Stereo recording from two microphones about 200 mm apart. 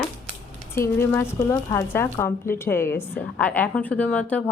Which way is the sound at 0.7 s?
10° left (ahead or behind).